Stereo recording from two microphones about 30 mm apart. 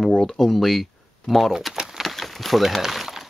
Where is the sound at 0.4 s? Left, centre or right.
Centre.